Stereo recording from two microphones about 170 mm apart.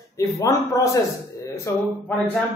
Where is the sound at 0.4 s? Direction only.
20° left (ahead or behind).